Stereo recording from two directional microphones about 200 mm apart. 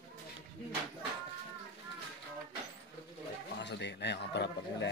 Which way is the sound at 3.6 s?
60° left (ahead or behind).